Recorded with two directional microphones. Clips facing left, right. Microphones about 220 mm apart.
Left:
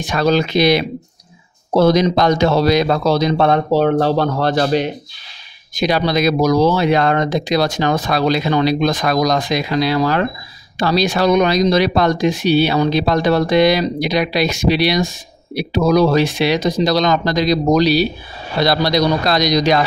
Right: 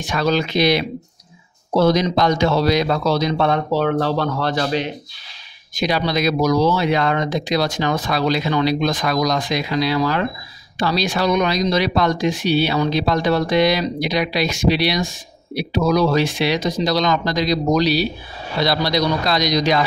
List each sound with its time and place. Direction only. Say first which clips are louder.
0.0 s speech: left 4 dB; 35° left (ahead or behind)